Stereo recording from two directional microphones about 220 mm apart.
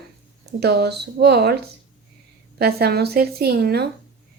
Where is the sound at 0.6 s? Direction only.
50° right (ahead or behind).